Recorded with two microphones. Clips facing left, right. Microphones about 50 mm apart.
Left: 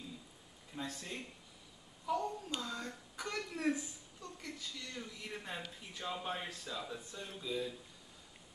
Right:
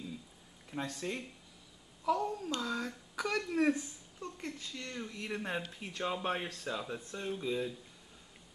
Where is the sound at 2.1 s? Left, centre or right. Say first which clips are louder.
Right 5 dB; right.